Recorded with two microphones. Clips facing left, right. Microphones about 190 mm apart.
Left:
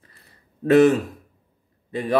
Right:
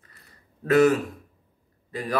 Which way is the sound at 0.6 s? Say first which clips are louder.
Left 4 dB; 30° left (ahead or behind).